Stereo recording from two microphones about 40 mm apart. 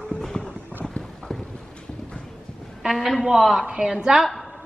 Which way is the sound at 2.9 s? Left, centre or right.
Centre.